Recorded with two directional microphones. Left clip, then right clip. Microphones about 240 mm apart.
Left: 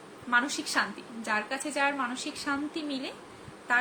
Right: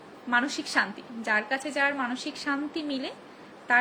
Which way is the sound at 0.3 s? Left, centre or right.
Centre.